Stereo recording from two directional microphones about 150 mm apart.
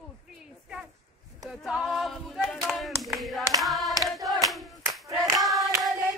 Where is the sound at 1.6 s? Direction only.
Centre (ahead or behind).